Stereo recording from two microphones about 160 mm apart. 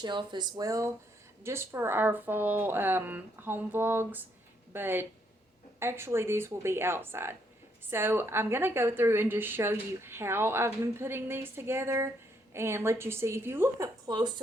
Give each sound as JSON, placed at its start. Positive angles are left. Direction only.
{"t": 0.0, "sound": "a woman's voice", "side_deg": -30}